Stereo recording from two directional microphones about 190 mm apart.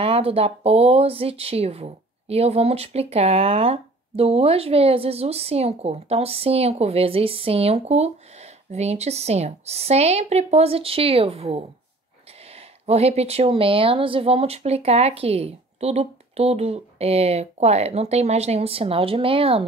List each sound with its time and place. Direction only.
0.0 s speech: 30° right (ahead or behind)